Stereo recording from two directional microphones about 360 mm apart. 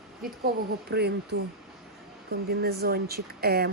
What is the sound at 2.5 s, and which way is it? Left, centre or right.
Speech, right.